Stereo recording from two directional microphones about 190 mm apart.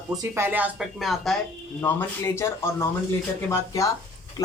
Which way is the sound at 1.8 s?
10° left (ahead or behind).